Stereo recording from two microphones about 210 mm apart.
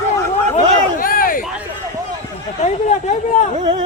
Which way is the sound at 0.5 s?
40° left (ahead or behind).